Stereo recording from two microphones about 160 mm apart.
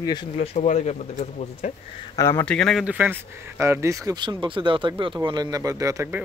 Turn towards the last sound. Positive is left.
turn(degrees=-20)  # may be behind; listen again after turning